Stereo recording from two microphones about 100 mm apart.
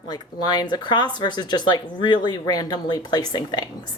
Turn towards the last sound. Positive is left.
turn(degrees=45)  # may be behind; listen again after turning